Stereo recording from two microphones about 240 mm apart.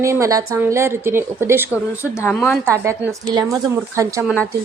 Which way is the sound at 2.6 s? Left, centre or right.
Centre.